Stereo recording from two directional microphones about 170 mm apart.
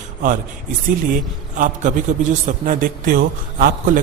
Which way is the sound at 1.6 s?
50° right (ahead or behind).